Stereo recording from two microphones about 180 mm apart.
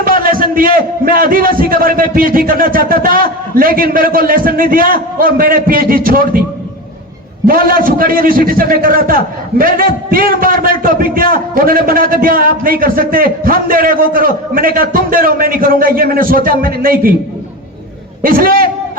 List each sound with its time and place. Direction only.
0.0 s a man's voice: 50° right (ahead or behind)
7.4 s a man's voice: 55° right (ahead or behind)
18.2 s a man's voice: 50° right (ahead or behind)